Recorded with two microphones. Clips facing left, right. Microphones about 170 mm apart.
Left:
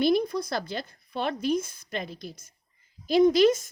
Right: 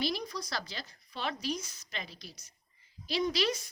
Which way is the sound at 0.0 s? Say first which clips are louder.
Left 11 dB; 55° left (ahead or behind).